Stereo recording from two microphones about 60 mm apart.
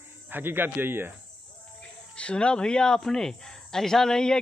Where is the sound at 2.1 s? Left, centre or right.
Centre.